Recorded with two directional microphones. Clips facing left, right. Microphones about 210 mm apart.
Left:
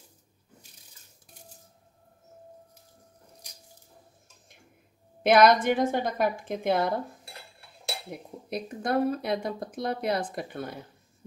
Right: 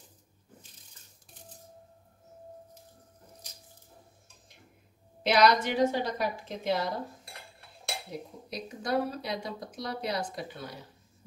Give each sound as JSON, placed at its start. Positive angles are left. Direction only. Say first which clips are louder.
{"t": 5.2, "sound": "a woman's voice", "louder": "left 4 dB", "side_deg": 55}
{"t": 8.1, "sound": "speech", "louder": "left 4 dB", "side_deg": 55}